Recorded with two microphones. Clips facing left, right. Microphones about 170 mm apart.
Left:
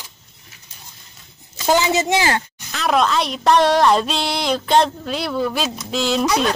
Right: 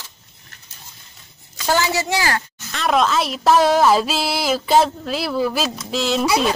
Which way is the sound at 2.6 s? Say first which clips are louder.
Even; centre (ahead or behind).